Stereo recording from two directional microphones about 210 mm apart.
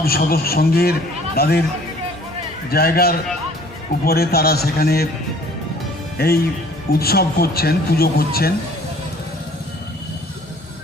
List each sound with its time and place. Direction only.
0.0 s a man's voice: 45° left (ahead or behind)
2.6 s a man's voice: 45° left (ahead or behind)
6.1 s a man's voice: 45° left (ahead or behind)